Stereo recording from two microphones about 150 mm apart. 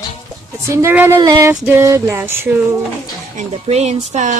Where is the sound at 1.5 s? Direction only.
15° right (ahead or behind).